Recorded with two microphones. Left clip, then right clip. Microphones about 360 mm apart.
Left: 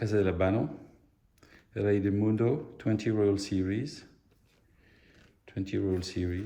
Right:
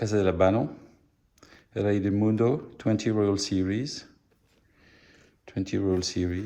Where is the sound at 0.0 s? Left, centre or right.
Centre.